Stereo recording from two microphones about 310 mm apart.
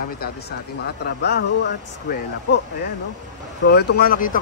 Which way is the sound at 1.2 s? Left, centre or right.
Left.